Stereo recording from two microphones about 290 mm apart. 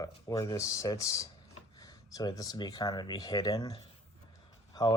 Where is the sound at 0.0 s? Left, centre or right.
Centre.